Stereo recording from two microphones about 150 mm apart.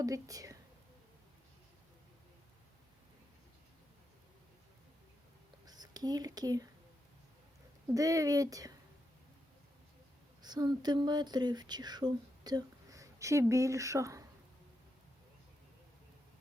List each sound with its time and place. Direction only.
0.0 s speech: 25° right (ahead or behind)
5.6 s speech: 25° right (ahead or behind)
7.9 s speech: 20° right (ahead or behind)
10.4 s speech: 30° right (ahead or behind)